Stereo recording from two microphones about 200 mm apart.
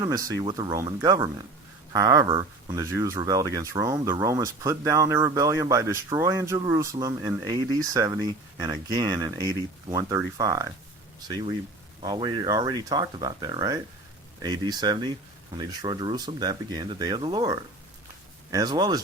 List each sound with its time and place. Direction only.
0.0 s speech: 20° right (ahead or behind)